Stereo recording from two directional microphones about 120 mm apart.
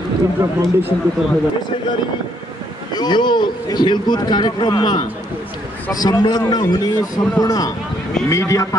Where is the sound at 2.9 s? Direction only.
35° left (ahead or behind).